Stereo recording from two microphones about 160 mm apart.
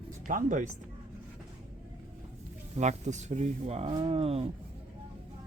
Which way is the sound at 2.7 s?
45° right (ahead or behind).